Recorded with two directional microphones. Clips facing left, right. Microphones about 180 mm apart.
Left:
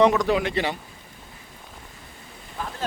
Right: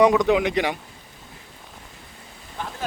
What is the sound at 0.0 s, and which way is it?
Speech, 15° right (ahead or behind).